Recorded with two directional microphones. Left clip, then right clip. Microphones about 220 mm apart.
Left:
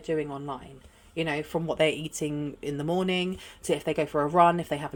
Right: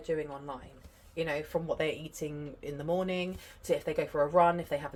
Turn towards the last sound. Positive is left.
turn(degrees=55)  # may be behind; listen again after turning